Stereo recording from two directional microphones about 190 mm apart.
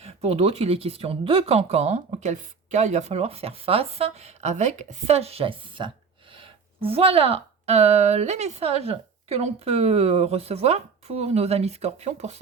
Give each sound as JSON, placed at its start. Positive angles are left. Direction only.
{"t": 0.0, "sound": "speech", "side_deg": -35}